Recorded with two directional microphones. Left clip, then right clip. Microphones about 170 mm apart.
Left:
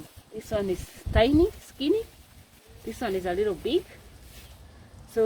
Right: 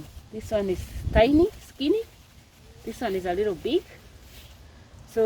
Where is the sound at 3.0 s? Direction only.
30° right (ahead or behind).